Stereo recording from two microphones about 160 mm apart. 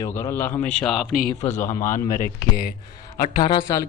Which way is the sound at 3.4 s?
25° left (ahead or behind).